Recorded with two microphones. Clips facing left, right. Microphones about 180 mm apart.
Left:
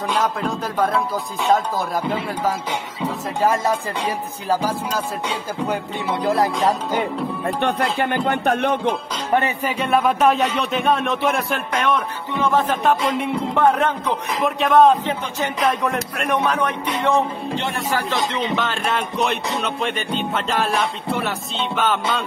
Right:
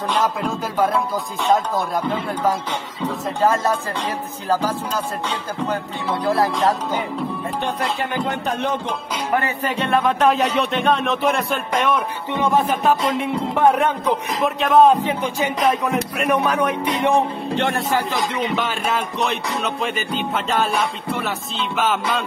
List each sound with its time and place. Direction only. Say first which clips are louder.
0.1 s speech: right 1 dB; centre (ahead or behind)
2.0 s speech: right 1 dB; 5° left (ahead or behind)
7.4 s speech: left 5 dB; 60° left (ahead or behind)
9.6 s speech: even; 10° left (ahead or behind)
12.4 s speech: right 1 dB; 15° right (ahead or behind)
18.6 s speech: even; 5° right (ahead or behind)